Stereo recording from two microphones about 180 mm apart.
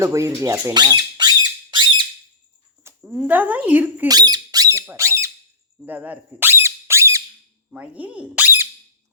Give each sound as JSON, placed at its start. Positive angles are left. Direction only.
{"t": 0.0, "sound": "squawk", "side_deg": -15}
{"t": 2.8, "sound": "a sound", "side_deg": -15}
{"t": 3.2, "sound": "speech", "side_deg": -10}
{"t": 4.1, "sound": "speech", "side_deg": -20}
{"t": 5.8, "sound": "squeak", "side_deg": -10}
{"t": 7.7, "sound": "speech", "side_deg": -5}